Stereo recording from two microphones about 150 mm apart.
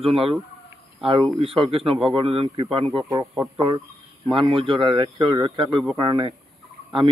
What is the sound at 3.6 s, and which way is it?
Speech, 25° right (ahead or behind).